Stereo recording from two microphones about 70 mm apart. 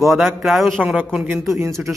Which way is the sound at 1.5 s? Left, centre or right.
Right.